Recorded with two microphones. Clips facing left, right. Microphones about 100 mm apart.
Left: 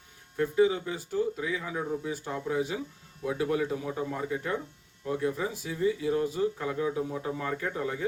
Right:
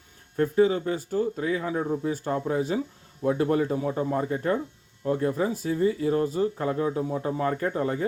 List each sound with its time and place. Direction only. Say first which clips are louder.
0.3 s speech: right 3 dB; 45° right (ahead or behind)